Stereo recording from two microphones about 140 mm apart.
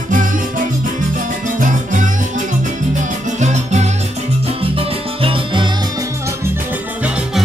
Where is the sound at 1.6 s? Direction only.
65° right (ahead or behind).